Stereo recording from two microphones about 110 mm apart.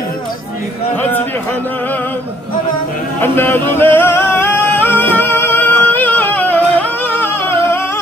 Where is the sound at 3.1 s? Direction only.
20° left (ahead or behind).